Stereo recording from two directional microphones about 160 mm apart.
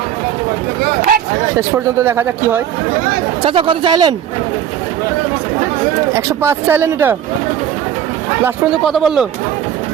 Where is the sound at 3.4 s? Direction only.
30° right (ahead or behind).